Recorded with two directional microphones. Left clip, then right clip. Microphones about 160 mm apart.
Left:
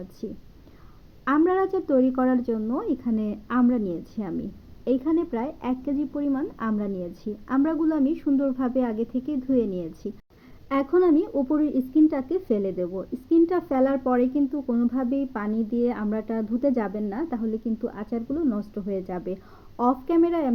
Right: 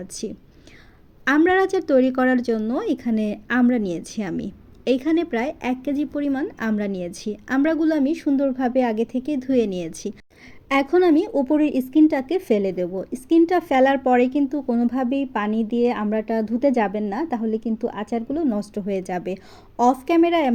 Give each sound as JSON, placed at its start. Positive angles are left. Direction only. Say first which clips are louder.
{"t": 1.2, "sound": "speech", "louder": "right 4 dB", "side_deg": -40}